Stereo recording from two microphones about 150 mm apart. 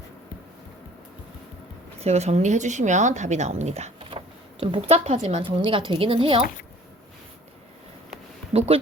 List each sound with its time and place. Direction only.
2.0 s speech: 45° right (ahead or behind)
5.4 s a woman's voice: 35° right (ahead or behind)
8.5 s speech: 40° right (ahead or behind)